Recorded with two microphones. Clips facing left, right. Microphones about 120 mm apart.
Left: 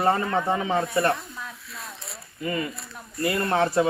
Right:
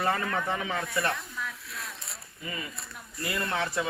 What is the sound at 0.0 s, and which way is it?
Speech, 30° left (ahead or behind).